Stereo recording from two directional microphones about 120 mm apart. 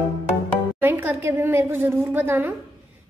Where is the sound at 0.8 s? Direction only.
15° right (ahead or behind).